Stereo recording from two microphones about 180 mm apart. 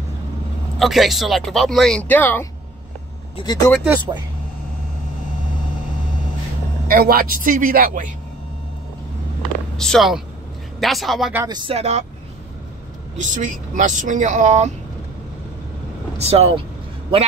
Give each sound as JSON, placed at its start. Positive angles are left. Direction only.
{"t": 0.7, "sound": "speech", "side_deg": 0}
{"t": 3.3, "sound": "speech", "side_deg": 25}
{"t": 6.9, "sound": "speech", "side_deg": -55}
{"t": 9.8, "sound": "speech", "side_deg": 0}
{"t": 11.4, "sound": "speech", "side_deg": -25}
{"t": 13.2, "sound": "speech", "side_deg": -45}
{"t": 16.2, "sound": "speech", "side_deg": -35}